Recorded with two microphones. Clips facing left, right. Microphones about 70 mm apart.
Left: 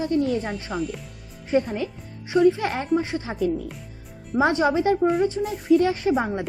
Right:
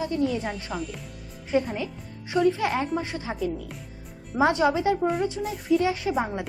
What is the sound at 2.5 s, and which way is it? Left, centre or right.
Speech, left.